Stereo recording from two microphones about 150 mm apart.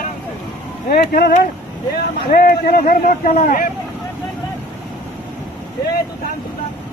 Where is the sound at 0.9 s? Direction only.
80° left; by 3.6 s 60° left (ahead or behind).